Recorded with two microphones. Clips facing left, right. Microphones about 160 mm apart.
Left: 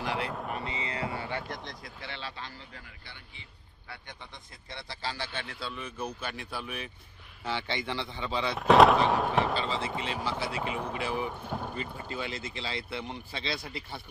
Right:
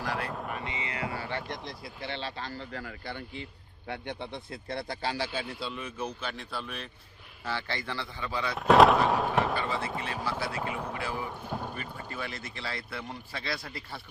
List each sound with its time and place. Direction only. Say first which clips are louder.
0.0 s a sound: left 1 dB; 20° left (ahead or behind)
0.3 s a sound: left 1 dB; centre (ahead or behind)
0.7 s music: left 1 dB; 30° left (ahead or behind)
1.5 s a man's voice: right 2 dB; centre (ahead or behind)
2.0 s speech: right 5 dB; 30° right (ahead or behind)
4.0 s speech: right 11 dB; 65° right (ahead or behind)
5.1 s a man's voice: right 5 dB; 10° right (ahead or behind)
6.0 s speech: right 1 dB; 10° left (ahead or behind)
8.5 s speech: even; centre (ahead or behind)
9.8 s speech: left 1 dB; 20° left (ahead or behind)
11.4 s a man's voice: even; centre (ahead or behind)
11.7 s speech: left 2 dB; 20° left (ahead or behind)